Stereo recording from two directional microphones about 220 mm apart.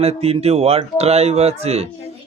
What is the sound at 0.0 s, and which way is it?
A man's voice, 30° right (ahead or behind).